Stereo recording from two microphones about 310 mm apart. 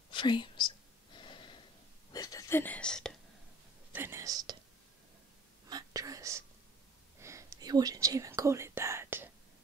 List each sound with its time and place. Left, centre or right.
0.1 s whispering: centre
3.9 s speech: centre
5.7 s whispering: centre